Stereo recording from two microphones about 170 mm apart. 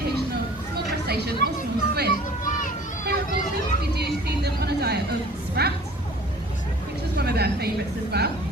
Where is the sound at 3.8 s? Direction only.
70° right (ahead or behind).